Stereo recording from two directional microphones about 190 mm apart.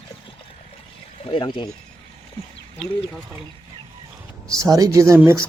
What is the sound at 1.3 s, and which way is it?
Speech, 25° left (ahead or behind).